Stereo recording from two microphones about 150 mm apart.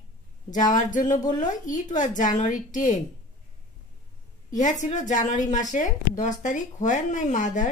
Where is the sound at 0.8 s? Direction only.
55° left (ahead or behind).